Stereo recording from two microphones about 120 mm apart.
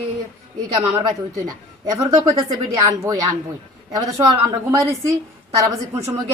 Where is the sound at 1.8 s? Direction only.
30° right (ahead or behind).